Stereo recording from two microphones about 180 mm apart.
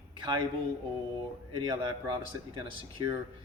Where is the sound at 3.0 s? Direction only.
20° right (ahead or behind).